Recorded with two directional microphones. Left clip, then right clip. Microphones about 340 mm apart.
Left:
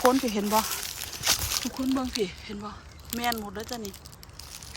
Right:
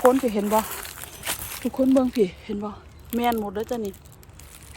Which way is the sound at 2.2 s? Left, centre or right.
Centre.